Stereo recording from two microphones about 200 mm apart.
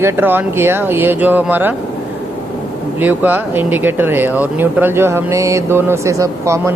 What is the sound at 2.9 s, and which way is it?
Speech, 10° right (ahead or behind).